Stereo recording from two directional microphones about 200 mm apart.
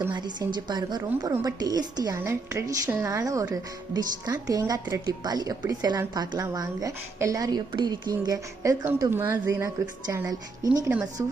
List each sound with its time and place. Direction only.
0.1 s a woman's voice: 20° right (ahead or behind)